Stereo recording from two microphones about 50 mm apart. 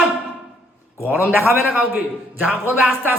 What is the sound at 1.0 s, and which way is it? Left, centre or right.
A man's voice, right.